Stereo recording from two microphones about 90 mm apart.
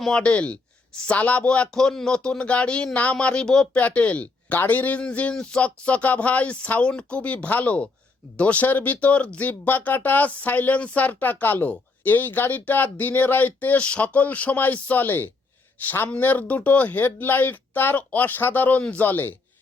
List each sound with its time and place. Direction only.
0.0 s speech: 10° left (ahead or behind)